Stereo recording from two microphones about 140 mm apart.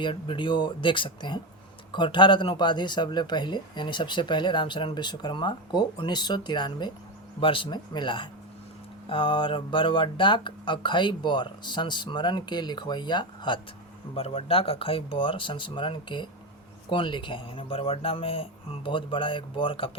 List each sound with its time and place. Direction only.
0.0 s speech: 35° left (ahead or behind)